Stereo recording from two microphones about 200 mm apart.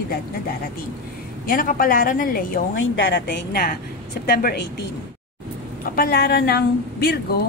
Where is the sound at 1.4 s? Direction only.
45° left (ahead or behind).